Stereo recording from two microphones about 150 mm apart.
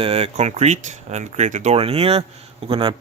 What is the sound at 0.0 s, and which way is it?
Speech, 40° right (ahead or behind).